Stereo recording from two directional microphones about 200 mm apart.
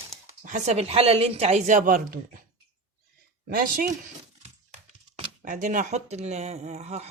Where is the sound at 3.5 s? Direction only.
45° right (ahead or behind).